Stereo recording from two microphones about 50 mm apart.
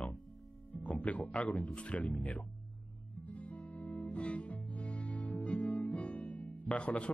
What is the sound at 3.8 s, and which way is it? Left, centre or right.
Music, left.